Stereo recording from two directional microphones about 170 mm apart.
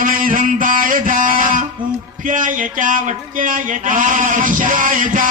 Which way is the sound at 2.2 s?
50° right (ahead or behind).